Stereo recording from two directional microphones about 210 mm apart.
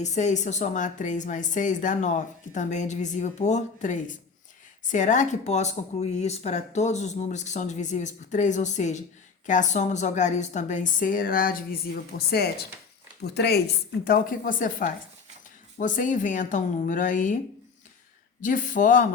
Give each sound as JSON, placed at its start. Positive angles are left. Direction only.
{"t": 0.0, "sound": "a woman's voice", "side_deg": 35}
{"t": 18.4, "sound": "a woman's voice", "side_deg": 40}